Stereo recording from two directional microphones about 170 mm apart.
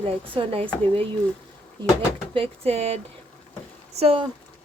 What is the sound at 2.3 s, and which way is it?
A woman's voice, 35° right (ahead or behind).